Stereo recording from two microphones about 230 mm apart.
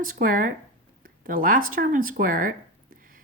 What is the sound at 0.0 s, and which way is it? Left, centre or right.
Speech, right.